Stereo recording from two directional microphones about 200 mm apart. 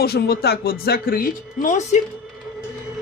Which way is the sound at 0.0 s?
50° left (ahead or behind).